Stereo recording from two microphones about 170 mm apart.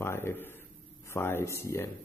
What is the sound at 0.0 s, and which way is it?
A man's voice, 15° left (ahead or behind).